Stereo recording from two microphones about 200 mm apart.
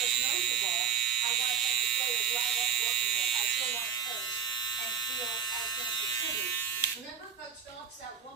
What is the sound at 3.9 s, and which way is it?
Electric shaver, 20° left (ahead or behind).